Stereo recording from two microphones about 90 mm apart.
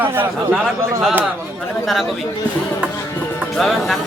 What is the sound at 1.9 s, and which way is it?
Speech, centre (ahead or behind).